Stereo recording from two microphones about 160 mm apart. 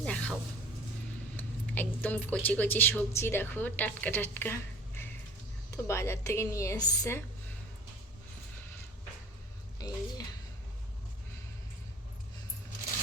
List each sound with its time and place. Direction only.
0.0 s vehicle: 10° left (ahead or behind)
1.4 s speech: 10° left (ahead or behind)
9.7 s a sound: 25° left (ahead or behind)